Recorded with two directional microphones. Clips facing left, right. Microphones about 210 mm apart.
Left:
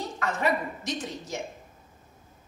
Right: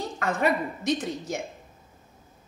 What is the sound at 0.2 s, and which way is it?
Speech, 55° right (ahead or behind).